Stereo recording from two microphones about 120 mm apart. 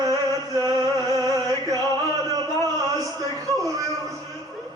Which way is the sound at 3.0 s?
30° right (ahead or behind).